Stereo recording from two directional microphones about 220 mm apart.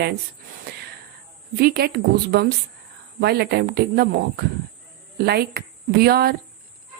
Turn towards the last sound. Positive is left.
turn(degrees=-45)  # may be behind; listen again after turning